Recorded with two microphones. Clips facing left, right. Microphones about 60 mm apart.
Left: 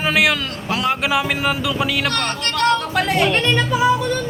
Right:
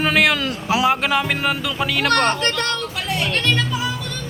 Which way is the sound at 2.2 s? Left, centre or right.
Right.